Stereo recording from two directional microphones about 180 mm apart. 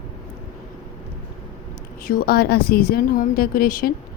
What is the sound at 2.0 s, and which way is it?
A woman's voice, 55° left (ahead or behind).